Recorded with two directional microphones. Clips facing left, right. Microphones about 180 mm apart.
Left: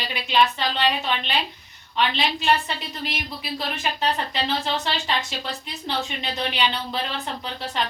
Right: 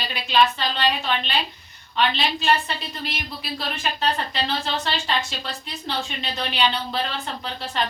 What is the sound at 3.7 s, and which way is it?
A woman's voice, 15° left (ahead or behind).